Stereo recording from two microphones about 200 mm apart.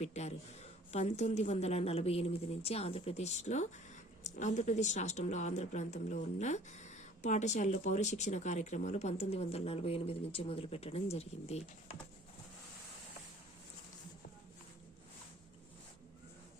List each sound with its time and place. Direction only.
0.0 s speech: 35° left (ahead or behind)